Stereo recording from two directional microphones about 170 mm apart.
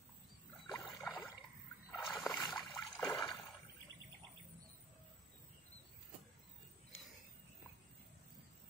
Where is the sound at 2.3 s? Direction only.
Centre (ahead or behind).